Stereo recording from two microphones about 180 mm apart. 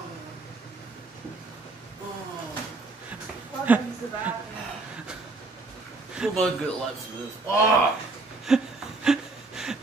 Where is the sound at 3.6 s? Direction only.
10° right (ahead or behind).